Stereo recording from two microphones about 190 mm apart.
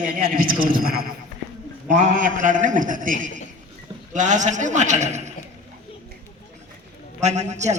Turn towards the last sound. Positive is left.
turn(degrees=-35)  # may be behind; listen again after turning